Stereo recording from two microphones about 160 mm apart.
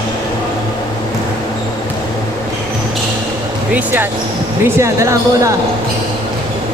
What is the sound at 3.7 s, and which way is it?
Speech, 15° right (ahead or behind).